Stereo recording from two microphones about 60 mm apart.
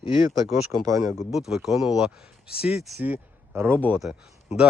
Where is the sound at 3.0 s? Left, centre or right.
Right.